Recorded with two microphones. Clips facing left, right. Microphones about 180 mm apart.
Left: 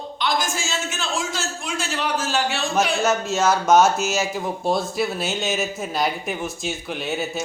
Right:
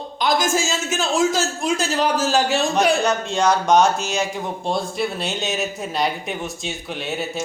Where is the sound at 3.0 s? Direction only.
5° left (ahead or behind).